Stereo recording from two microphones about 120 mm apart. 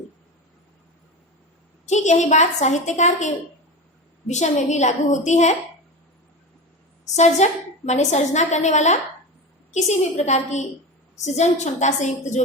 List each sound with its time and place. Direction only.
1.9 s a woman's voice: 75° left (ahead or behind)
7.0 s a woman's voice: 75° left (ahead or behind)